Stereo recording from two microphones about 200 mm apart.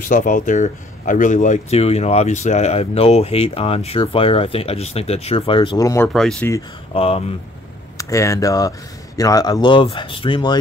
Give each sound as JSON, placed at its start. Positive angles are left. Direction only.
{"t": 0.0, "sound": "speech", "side_deg": 40}
{"t": 6.0, "sound": "speech", "side_deg": 5}
{"t": 6.9, "sound": "speech", "side_deg": 30}
{"t": 8.0, "sound": "speech", "side_deg": 15}